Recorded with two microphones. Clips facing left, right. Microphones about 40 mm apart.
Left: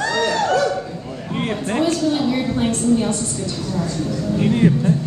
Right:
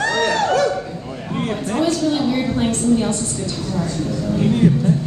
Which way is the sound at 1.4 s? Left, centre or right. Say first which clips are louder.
Even; left.